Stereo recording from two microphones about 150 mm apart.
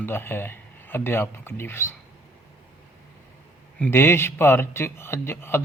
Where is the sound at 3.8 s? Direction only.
15° left (ahead or behind).